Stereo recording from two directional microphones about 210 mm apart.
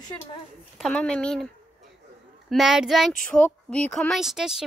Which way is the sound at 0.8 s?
5° left (ahead or behind).